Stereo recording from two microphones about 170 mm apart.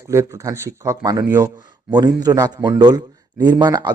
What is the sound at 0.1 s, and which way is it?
Speech, 15° right (ahead or behind).